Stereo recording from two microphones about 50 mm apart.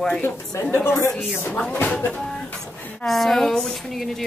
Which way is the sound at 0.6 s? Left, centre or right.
Left.